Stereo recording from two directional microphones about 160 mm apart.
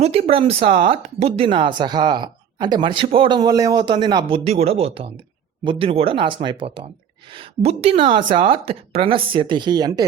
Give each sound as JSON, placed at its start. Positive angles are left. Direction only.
{"t": 0.0, "sound": "speech", "side_deg": -40}
{"t": 4.4, "sound": "speech", "side_deg": -40}